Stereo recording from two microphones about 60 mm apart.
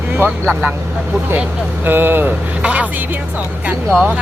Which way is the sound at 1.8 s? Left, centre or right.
Right.